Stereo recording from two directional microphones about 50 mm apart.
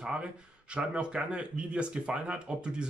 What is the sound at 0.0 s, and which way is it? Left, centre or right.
Speech, right.